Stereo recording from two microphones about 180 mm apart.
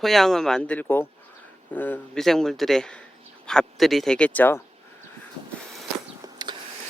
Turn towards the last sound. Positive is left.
turn(degrees=-25)  # may be behind; listen again after turning